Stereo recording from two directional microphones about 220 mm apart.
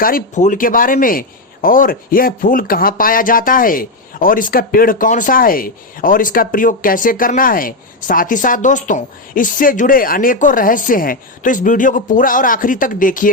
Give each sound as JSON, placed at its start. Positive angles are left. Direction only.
{"t": 0.0, "sound": "speech", "side_deg": 35}